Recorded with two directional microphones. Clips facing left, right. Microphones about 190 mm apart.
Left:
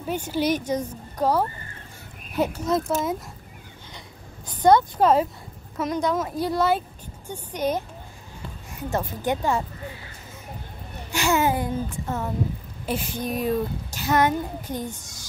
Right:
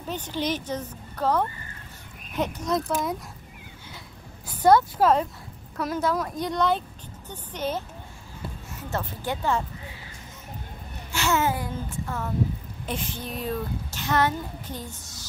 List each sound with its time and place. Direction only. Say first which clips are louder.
0.0 s a child's voice: left 5 dB; 10° left (ahead or behind)
4.6 s a child's voice: left 1 dB; 5° right (ahead or behind); by 9.7 s 10° left (ahead or behind)
11.1 s a child's voice: left 3 dB; 15° left (ahead or behind)
12.8 s a child's voice: left 5 dB; 10° left (ahead or behind)